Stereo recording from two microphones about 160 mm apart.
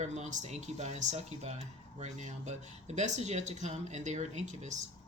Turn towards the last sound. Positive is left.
turn(degrees=-45)  # may be behind; listen again after turning